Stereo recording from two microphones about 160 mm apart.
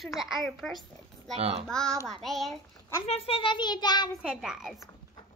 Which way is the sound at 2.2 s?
Centre (ahead or behind).